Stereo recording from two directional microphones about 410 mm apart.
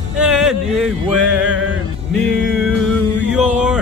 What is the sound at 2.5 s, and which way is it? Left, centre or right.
Music, centre.